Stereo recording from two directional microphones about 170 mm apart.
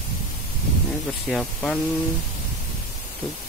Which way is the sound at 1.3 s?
5° left (ahead or behind).